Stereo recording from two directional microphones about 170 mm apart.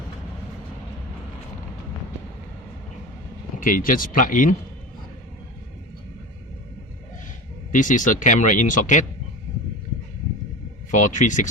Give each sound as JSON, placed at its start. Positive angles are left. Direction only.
{"t": 3.6, "sound": "speech", "side_deg": 55}
{"t": 7.7, "sound": "speech", "side_deg": 50}
{"t": 10.9, "sound": "speech", "side_deg": 50}